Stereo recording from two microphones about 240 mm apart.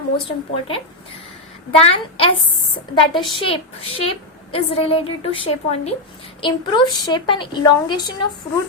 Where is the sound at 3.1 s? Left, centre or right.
Centre.